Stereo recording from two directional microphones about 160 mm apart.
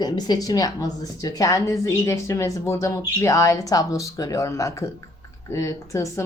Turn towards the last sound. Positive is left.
turn(degrees=20)  # may be behind; listen again after turning